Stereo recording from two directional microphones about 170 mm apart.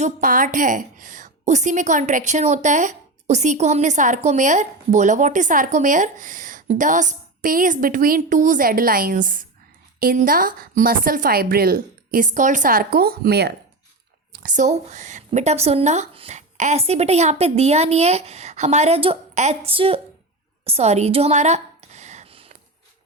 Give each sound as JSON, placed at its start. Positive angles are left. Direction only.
{"t": 0.0, "sound": "a woman's voice", "side_deg": -55}
{"t": 14.3, "sound": "a woman's voice", "side_deg": -50}
{"t": 20.7, "sound": "a sound", "side_deg": -40}